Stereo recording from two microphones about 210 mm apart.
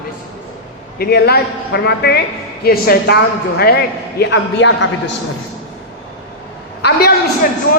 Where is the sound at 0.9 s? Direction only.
50° left (ahead or behind).